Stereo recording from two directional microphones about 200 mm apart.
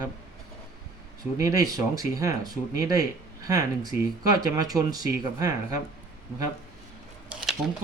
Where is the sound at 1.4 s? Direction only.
15° right (ahead or behind).